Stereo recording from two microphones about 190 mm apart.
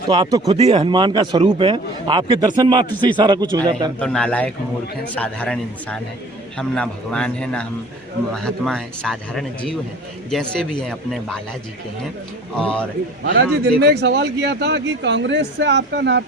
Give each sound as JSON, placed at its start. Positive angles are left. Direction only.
{"t": 0.1, "sound": "a man's voice", "side_deg": -20}
{"t": 0.4, "sound": "a man's voice", "side_deg": -30}
{"t": 4.0, "sound": "a man's voice", "side_deg": 5}
{"t": 12.5, "sound": "speech", "side_deg": 5}
{"t": 13.3, "sound": "a man's voice", "side_deg": -60}